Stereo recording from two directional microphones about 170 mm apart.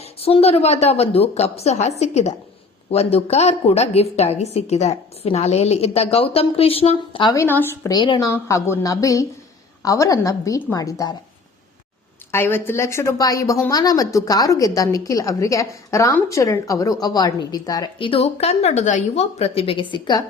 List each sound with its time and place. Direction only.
0.0 s a woman's voice: 35° left (ahead or behind)
7.3 s a woman's voice: 15° left (ahead or behind)
7.9 s a woman's voice: 25° left (ahead or behind)
12.3 s a woman's voice: 15° left (ahead or behind)